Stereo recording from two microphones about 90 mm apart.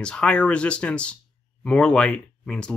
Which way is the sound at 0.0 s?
10° left (ahead or behind).